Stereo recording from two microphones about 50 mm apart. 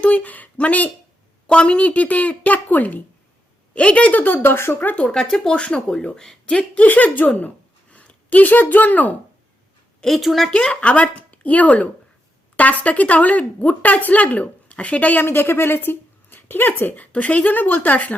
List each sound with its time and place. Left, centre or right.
0.0 s a woman's voice: left
3.8 s a woman's voice: left
5.0 s speech: centre
6.8 s a woman's voice: left
10.2 s speech: centre
10.5 s a woman's voice: left
15.2 s speech: left
17.1 s a woman's voice: left